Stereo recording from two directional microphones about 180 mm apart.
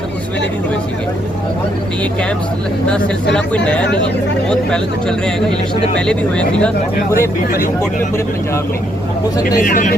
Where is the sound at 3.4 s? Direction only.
5° left (ahead or behind).